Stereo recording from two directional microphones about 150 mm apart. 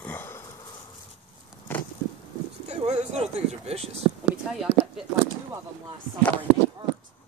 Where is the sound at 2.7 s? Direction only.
50° right (ahead or behind).